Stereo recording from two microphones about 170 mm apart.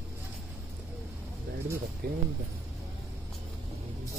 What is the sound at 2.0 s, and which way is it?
Speech, 65° right (ahead or behind).